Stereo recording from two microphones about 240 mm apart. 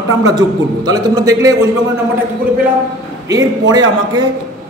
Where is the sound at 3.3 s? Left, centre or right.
Centre.